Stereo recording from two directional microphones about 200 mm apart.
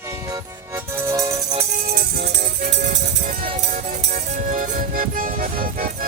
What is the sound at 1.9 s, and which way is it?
Music, 50° right (ahead or behind).